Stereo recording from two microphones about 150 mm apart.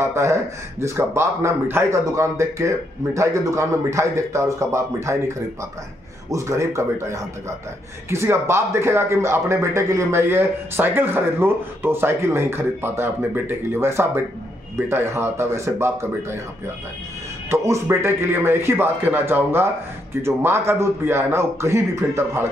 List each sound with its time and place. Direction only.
0.0 s a man's voice: 20° right (ahead or behind)
6.3 s a man's voice: 20° right (ahead or behind)
17.5 s speech: 15° right (ahead or behind)